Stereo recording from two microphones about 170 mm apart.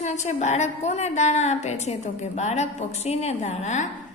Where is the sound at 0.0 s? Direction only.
45° left (ahead or behind).